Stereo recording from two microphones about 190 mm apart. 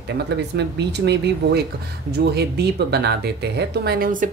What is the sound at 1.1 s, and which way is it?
A woman's voice, 60° right (ahead or behind).